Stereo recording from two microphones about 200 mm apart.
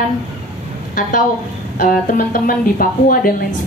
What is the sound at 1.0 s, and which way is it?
A woman's voice, 45° left (ahead or behind).